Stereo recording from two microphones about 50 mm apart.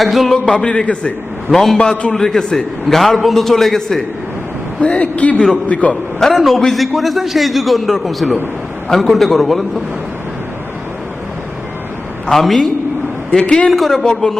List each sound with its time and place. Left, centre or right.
0.0 s a man's voice: centre
0.3 s a man's voice: left
1.5 s a man's voice: centre
1.8 s a man's voice: centre
4.8 s a man's voice: left
6.1 s a man's voice: centre
12.3 s a man's voice: centre
13.3 s a man's voice: centre
13.7 s a man's voice: centre
14.0 s a man's voice: centre